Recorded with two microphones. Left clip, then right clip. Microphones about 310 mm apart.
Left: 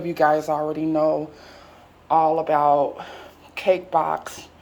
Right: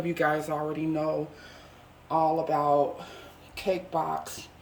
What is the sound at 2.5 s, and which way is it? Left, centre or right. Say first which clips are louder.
Speech: left 9 dB; centre.